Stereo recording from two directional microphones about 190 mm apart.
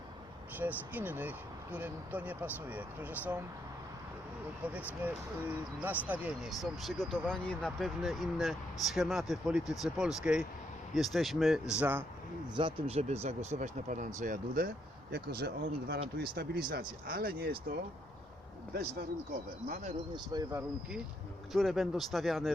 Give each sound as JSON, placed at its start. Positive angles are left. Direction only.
{"t": 0.6, "sound": "speech", "side_deg": -10}
{"t": 5.0, "sound": "speech", "side_deg": -10}
{"t": 12.5, "sound": "speech", "side_deg": -30}
{"t": 19.6, "sound": "speech", "side_deg": -40}
{"t": 20.1, "sound": "speech", "side_deg": -20}
{"t": 21.5, "sound": "speech", "side_deg": 0}